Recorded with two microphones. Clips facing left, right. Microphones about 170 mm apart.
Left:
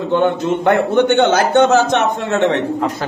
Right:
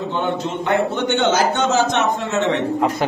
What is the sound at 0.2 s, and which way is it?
A man's voice, 55° left (ahead or behind).